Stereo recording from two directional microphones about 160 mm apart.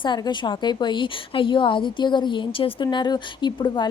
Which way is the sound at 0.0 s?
30° left (ahead or behind).